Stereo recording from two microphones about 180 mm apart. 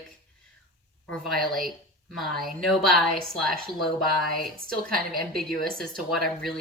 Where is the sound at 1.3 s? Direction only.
Centre (ahead or behind).